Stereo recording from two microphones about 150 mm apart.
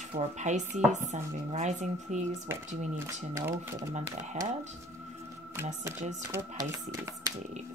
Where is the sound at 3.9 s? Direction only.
50° right (ahead or behind).